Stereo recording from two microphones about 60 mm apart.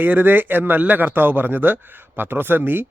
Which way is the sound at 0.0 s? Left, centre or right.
Right.